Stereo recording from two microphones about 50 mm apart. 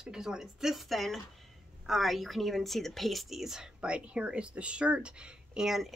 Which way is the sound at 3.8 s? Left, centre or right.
Right.